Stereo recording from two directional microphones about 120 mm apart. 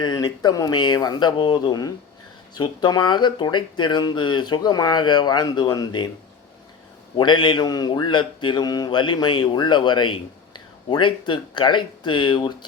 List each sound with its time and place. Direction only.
0.0 s speech: 40° left (ahead or behind)
7.2 s speech: 40° left (ahead or behind)